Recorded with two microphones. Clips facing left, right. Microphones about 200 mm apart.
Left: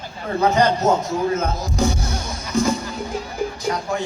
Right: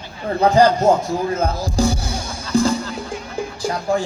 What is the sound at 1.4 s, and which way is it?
Music, 30° right (ahead or behind).